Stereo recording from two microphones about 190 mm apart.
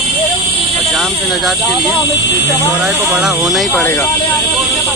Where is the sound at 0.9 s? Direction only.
Centre (ahead or behind).